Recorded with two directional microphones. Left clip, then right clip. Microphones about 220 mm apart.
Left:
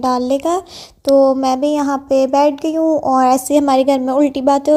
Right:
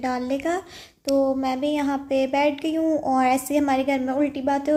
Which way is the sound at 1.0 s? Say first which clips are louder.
Left 10 dB; 40° left (ahead or behind).